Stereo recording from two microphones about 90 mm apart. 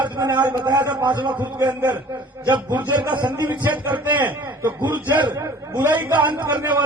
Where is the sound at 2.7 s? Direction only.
60° right (ahead or behind).